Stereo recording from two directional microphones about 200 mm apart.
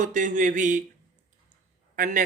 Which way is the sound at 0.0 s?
40° right (ahead or behind).